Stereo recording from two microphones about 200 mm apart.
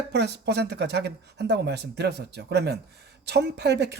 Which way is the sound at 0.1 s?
55° right (ahead or behind).